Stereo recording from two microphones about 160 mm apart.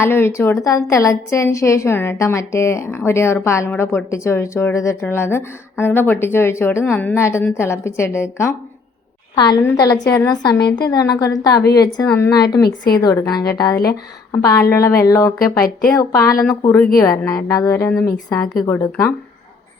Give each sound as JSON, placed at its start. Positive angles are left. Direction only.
{"t": 0.0, "sound": "a woman's voice", "side_deg": 15}
{"t": 12.0, "sound": "a woman's voice", "side_deg": 15}
{"t": 12.3, "sound": "a woman's voice", "side_deg": 25}